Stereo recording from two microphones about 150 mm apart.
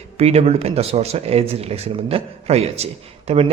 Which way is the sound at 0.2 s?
45° right (ahead or behind).